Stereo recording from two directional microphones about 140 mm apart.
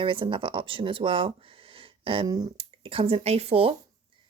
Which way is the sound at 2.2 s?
30° right (ahead or behind).